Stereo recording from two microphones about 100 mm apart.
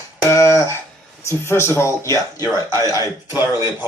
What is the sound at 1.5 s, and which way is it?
A man's voice, 25° left (ahead or behind).